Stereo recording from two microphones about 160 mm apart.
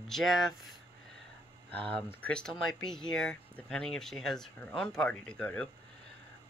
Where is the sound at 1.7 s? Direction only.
35° right (ahead or behind).